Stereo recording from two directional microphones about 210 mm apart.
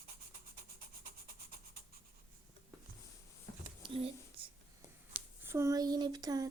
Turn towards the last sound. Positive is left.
turn(degrees=-15)  # may be behind; listen again after turning